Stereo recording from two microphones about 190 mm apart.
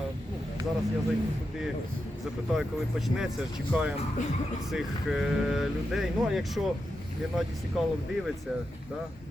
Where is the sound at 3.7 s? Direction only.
5° right (ahead or behind).